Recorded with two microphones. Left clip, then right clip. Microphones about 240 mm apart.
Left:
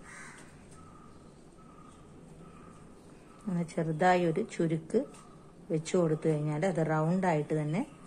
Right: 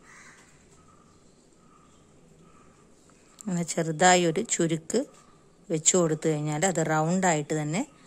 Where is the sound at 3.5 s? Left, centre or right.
Right.